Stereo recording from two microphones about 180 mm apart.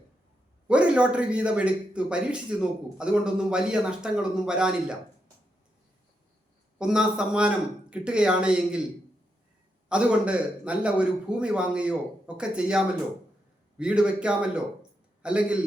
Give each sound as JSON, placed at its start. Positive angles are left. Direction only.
{"t": 0.7, "sound": "a man's voice", "side_deg": -5}
{"t": 6.7, "sound": "a man's voice", "side_deg": -5}
{"t": 9.9, "sound": "a man's voice", "side_deg": -5}